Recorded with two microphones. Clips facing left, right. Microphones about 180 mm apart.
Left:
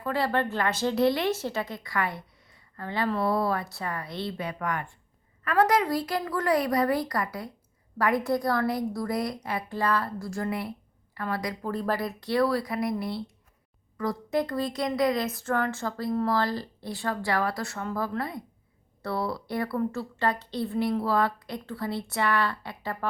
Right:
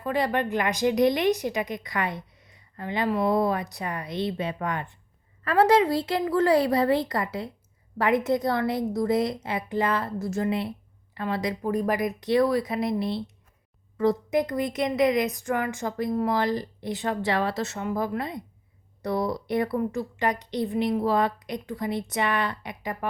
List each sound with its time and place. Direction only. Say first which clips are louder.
0.0 s a woman's voice: right 1 dB; 20° right (ahead or behind)